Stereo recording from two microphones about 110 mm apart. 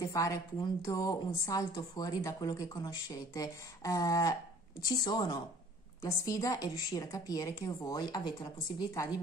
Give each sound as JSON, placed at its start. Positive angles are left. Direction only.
{"t": 0.0, "sound": "a woman's voice", "side_deg": 30}